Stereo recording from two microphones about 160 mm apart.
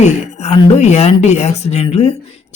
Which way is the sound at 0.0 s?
45° left (ahead or behind).